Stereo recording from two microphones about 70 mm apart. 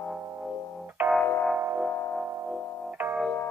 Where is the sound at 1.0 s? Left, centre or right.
Right.